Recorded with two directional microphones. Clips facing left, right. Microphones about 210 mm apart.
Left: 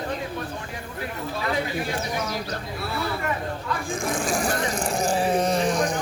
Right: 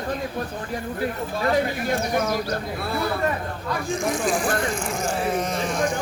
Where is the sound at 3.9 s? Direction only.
50° left (ahead or behind).